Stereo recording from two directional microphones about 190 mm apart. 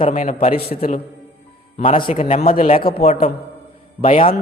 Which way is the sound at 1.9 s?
30° left (ahead or behind).